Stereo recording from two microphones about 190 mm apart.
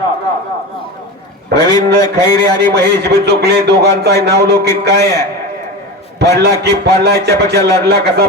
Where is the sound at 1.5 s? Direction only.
20° left (ahead or behind).